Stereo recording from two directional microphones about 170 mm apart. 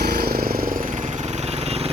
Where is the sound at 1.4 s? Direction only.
40° right (ahead or behind).